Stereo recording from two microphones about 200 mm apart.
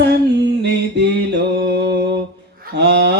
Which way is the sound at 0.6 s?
55° right (ahead or behind).